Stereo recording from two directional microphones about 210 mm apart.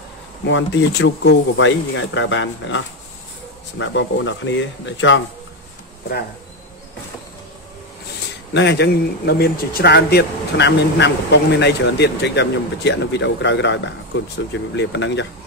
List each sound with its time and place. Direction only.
0.5 s speech: 60° left (ahead or behind)
8.5 s speech: 55° left (ahead or behind)